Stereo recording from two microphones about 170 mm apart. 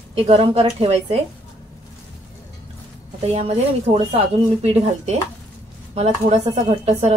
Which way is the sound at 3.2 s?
40° right (ahead or behind).